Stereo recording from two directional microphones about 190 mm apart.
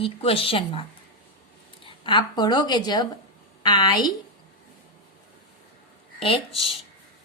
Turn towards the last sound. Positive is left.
turn(degrees=30)  # may be behind; listen again after turning